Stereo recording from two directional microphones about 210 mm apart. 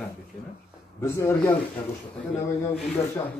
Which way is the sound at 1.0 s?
15° left (ahead or behind).